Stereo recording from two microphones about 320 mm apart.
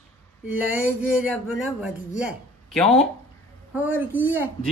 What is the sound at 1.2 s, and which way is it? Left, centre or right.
A man's voice, centre.